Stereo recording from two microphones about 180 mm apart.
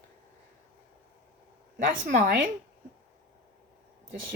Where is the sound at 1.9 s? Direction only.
65° right (ahead or behind).